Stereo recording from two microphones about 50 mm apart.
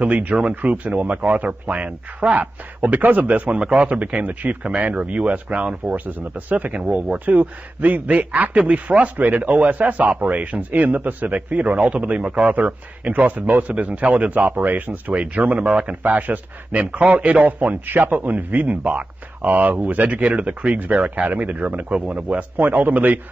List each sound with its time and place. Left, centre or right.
0.0 s a man's voice: right
22.6 s a man's voice: right